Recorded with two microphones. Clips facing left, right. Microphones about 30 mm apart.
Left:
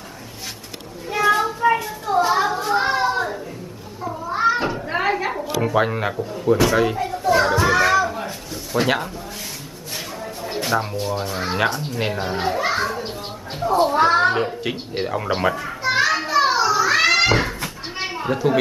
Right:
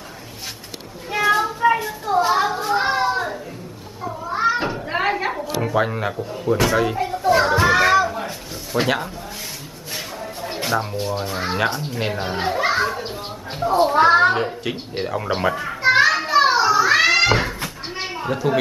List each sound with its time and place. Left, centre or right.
1.1 s children playing: centre
4.3 s cat: centre
5.4 s a woman's voice: centre
7.0 s speech: centre
7.6 s children playing: centre
8.1 s a sound: centre
11.1 s a woman's voice: centre
12.3 s children playing: centre
13.6 s speech: centre
14.3 s a woman's voice: centre
16.1 s children playing: centre
16.3 s children playing: right
16.7 s cat: centre